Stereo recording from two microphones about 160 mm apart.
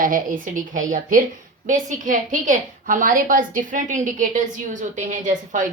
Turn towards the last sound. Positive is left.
turn(degrees=-55)  # may be behind; listen again after turning